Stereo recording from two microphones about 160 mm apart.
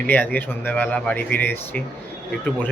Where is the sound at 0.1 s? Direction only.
10° left (ahead or behind).